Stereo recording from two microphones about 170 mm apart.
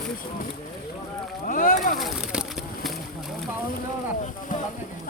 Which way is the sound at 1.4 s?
55° left (ahead or behind).